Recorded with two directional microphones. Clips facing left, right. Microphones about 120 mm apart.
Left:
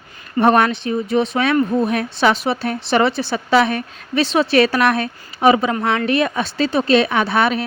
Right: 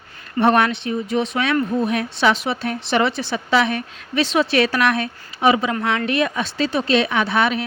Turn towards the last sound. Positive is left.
turn(degrees=40)  # may be behind; listen again after turning